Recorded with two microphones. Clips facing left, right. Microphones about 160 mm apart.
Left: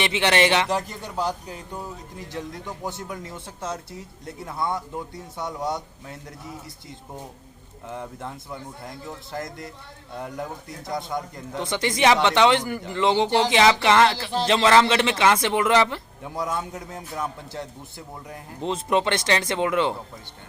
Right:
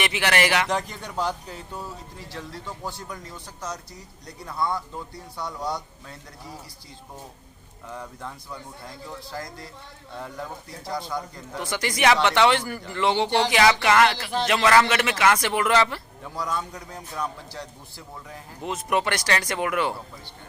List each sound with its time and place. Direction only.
0.0 s speech: 25° left (ahead or behind)
0.7 s a man's voice: 5° left (ahead or behind); by 6.6 s 20° left (ahead or behind)
7.9 s speech: 25° left (ahead or behind)